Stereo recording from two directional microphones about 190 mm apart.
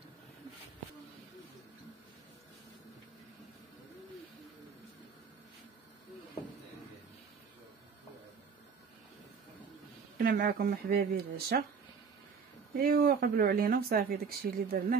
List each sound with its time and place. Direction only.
10.1 s speech: 50° right (ahead or behind)
12.7 s speech: 50° right (ahead or behind)